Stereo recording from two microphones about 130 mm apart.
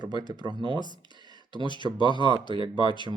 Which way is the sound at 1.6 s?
35° left (ahead or behind).